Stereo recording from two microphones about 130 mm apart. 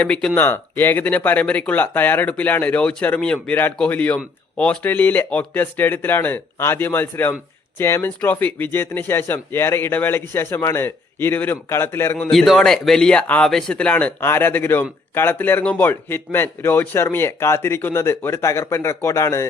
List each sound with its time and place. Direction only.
0.0 s speech: 5° left (ahead or behind)
12.3 s speech: centre (ahead or behind); by 19.5 s 25° left (ahead or behind)